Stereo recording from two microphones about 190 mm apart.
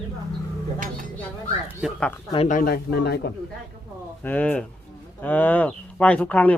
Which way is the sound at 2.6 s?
55° left (ahead or behind).